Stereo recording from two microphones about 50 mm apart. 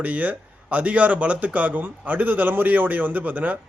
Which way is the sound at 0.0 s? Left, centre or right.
Right.